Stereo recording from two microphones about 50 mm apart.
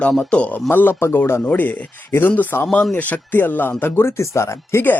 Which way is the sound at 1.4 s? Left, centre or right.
Left.